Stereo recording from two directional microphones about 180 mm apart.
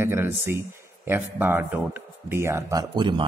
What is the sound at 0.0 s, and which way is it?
Speech, 10° right (ahead or behind).